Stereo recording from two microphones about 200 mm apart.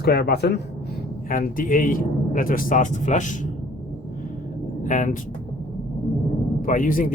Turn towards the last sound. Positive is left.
turn(degrees=45)  # may be behind; listen again after turning